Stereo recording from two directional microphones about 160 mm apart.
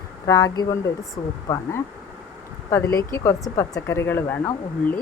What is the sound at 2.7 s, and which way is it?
Speech, 15° left (ahead or behind).